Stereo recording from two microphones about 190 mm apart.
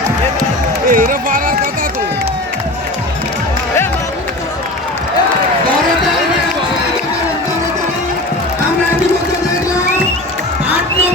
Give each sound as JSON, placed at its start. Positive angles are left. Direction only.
{"t": 0.9, "sound": "speech", "side_deg": -45}